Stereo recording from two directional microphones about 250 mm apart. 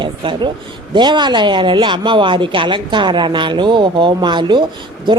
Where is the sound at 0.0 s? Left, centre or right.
Centre.